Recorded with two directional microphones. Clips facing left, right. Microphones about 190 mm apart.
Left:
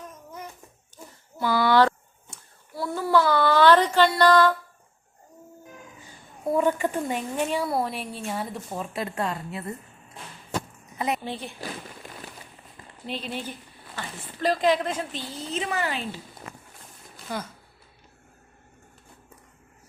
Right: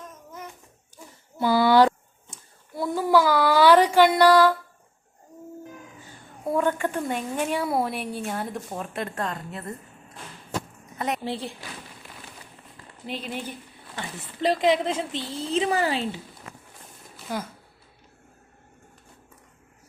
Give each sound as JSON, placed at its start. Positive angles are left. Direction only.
{"t": 1.4, "sound": "a child's voice", "side_deg": -20}
{"t": 6.1, "sound": "a woman's voice", "side_deg": 5}
{"t": 10.9, "sound": "a sound", "side_deg": 10}
{"t": 13.1, "sound": "a woman's voice", "side_deg": -10}
{"t": 14.4, "sound": "speech", "side_deg": -20}